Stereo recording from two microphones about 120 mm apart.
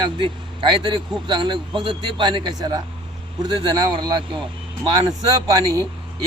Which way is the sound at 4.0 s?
40° right (ahead or behind).